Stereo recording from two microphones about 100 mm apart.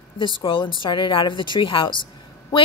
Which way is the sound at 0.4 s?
55° left (ahead or behind).